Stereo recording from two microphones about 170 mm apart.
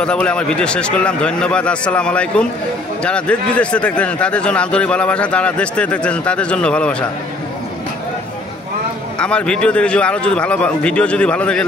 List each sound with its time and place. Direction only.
0.0 s a man's voice: 5° left (ahead or behind)
9.2 s speech: 5° left (ahead or behind)